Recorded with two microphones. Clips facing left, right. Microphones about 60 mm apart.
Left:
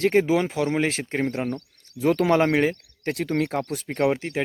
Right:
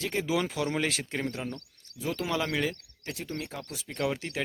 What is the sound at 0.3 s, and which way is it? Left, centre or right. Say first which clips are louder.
Speech: left 7 dB; left.